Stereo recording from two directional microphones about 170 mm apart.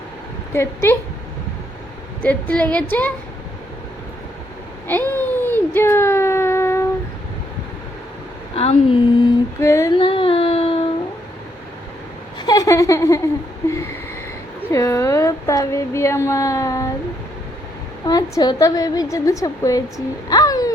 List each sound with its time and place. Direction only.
0.5 s a woman's voice: 15° left (ahead or behind)
2.2 s a woman's voice: 10° left (ahead or behind)
4.9 s a sound: 10° left (ahead or behind)
8.5 s a woman's voice: 35° left (ahead or behind); by 9.9 s 15° left (ahead or behind)
10.0 s child singing: 30° left (ahead or behind)
12.4 s a woman's voice: 20° left (ahead or behind)
14.7 s a woman's voice: 20° left (ahead or behind)
18.0 s a woman's voice: 20° left (ahead or behind)
20.3 s a sound: 20° left (ahead or behind)